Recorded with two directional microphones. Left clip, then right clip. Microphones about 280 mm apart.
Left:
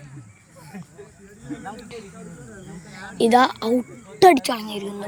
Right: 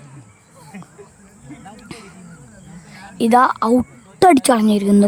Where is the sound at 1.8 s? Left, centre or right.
Right.